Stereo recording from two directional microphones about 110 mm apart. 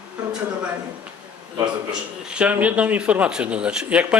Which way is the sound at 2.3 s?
10° right (ahead or behind).